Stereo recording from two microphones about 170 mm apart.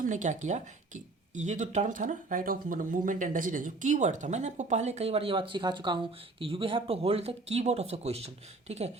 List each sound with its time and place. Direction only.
0.0 s speech: 45° right (ahead or behind)